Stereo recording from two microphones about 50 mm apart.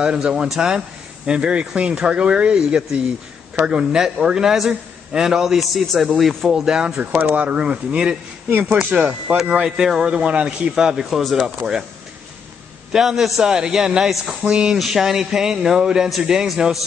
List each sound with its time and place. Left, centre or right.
0.0 s a man's voice: centre
8.5 s speech: right
8.9 s speech: right
9.7 s a man's voice: centre
10.1 s speech: right
10.7 s a man's voice: centre
12.9 s a man's voice: centre
14.4 s speech: centre
14.8 s a man's voice: centre